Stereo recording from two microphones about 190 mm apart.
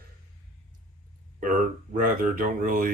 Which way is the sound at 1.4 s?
45° right (ahead or behind).